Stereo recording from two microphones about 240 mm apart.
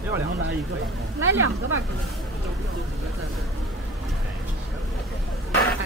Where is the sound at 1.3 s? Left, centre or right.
Right.